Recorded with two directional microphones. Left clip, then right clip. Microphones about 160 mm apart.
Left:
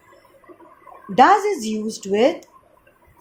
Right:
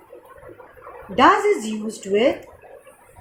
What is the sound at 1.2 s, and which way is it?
A woman's voice, 60° left (ahead or behind).